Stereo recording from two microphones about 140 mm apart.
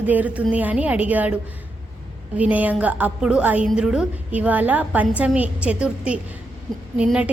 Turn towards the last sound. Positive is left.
turn(degrees=-5)  # may be behind; listen again after turning